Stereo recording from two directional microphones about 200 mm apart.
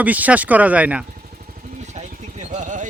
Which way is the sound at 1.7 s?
35° right (ahead or behind).